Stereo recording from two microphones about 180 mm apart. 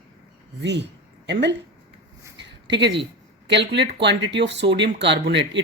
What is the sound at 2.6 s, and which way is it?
Speech, 75° right (ahead or behind).